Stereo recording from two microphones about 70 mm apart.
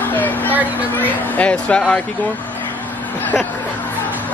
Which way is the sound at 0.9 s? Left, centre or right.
Left.